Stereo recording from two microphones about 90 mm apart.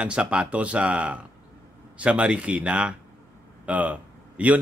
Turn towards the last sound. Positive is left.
turn(degrees=-15)  # may be behind; listen again after turning